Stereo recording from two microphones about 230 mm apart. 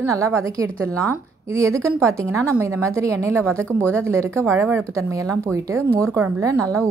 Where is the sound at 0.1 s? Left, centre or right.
Centre.